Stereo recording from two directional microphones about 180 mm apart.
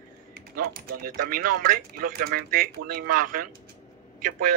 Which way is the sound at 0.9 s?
55° right (ahead or behind).